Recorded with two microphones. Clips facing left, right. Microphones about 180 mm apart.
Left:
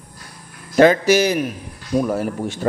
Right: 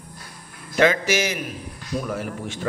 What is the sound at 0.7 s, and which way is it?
A man's voice, 40° left (ahead or behind).